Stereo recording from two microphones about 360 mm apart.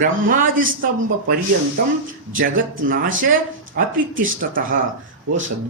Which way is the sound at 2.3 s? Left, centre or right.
Right.